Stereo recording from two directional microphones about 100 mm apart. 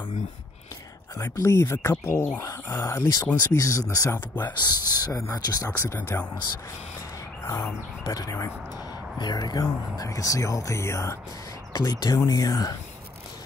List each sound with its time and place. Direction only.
1.1 s speech: 30° left (ahead or behind)
4.5 s speech: 45° left (ahead or behind)
5.7 s speech: 25° left (ahead or behind)
7.4 s speech: 25° left (ahead or behind)
8.0 s speech: 40° left (ahead or behind)
11.7 s speech: 45° left (ahead or behind)